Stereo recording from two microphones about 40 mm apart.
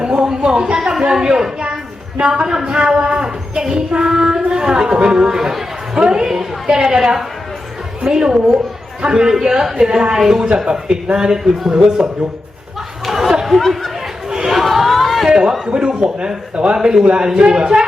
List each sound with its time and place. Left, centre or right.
0.0 s a sound: right
0.4 s a woman's voice: centre
13.1 s chatter: centre
13.6 s speech: centre
14.3 s chatter: centre
14.5 s a sound: centre
15.3 s a woman's voice: right